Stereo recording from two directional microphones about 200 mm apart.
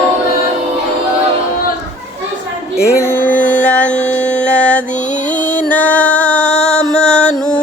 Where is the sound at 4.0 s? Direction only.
35° left (ahead or behind).